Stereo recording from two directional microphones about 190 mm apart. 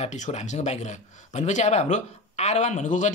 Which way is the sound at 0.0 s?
35° left (ahead or behind).